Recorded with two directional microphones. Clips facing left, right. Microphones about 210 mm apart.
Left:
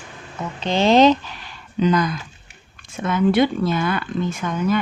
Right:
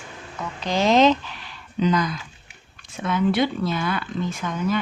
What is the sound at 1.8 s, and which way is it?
Speech, 55° left (ahead or behind).